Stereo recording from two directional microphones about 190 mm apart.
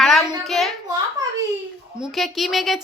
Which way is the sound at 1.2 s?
20° right (ahead or behind).